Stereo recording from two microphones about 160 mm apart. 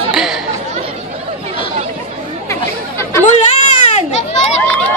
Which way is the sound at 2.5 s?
20° left (ahead or behind).